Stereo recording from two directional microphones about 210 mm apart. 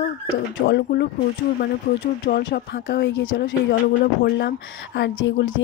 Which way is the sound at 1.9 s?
40° left (ahead or behind).